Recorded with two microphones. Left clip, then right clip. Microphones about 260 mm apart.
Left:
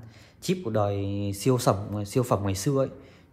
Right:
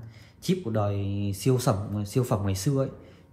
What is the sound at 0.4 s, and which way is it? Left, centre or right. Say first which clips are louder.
Speech: left 2 dB; left.